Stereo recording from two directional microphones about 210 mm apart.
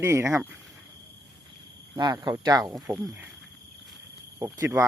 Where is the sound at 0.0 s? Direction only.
10° right (ahead or behind).